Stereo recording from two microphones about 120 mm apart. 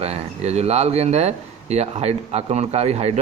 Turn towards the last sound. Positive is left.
turn(degrees=-60)  # may be behind; listen again after turning